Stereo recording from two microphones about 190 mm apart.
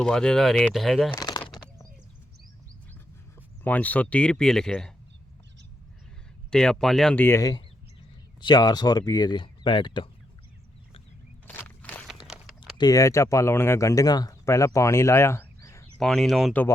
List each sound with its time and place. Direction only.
0.0 s speech: 5° left (ahead or behind)
1.1 s a sound: 15° left (ahead or behind)
3.6 s speech: 10° left (ahead or behind)
6.5 s speech: 5° left (ahead or behind); by 10.1 s 25° left (ahead or behind)
11.4 s a sound: 10° left (ahead or behind)
12.8 s speech: 15° left (ahead or behind)
16.0 s speech: centre (ahead or behind)